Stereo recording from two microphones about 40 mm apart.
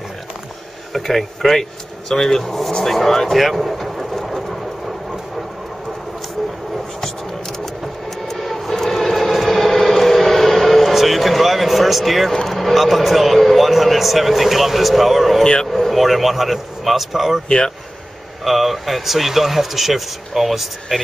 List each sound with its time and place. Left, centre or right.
0.9 s speech: centre
2.7 s vehicle: centre
7.8 s vehicle: centre
12.4 s a man's voice: centre
17.5 s speech: left
18.4 s a man's voice: centre